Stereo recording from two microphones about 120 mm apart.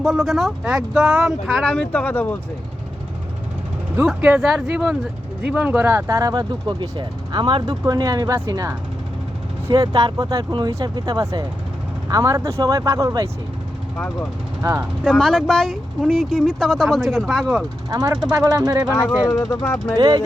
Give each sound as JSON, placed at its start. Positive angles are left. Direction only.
{"t": 0.0, "sound": "speech", "side_deg": 0}
{"t": 4.0, "sound": "speech", "side_deg": -5}
{"t": 9.7, "sound": "speech", "side_deg": -35}
{"t": 14.6, "sound": "speech", "side_deg": -15}
{"t": 15.0, "sound": "speech", "side_deg": 5}
{"t": 17.8, "sound": "speech", "side_deg": -30}
{"t": 20.0, "sound": "speech", "side_deg": -35}